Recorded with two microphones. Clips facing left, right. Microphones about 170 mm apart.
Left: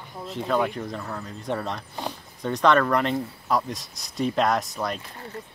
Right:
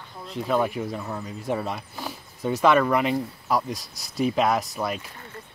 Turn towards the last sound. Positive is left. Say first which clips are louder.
# right 1 dB
turn(degrees=-5)  # may be behind; listen again after turning